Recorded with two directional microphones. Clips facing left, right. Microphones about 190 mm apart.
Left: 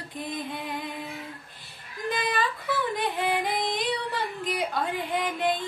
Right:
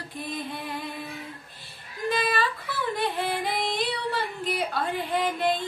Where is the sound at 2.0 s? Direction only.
15° left (ahead or behind).